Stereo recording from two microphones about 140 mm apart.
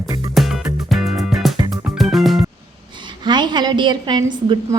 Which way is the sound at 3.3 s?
30° right (ahead or behind).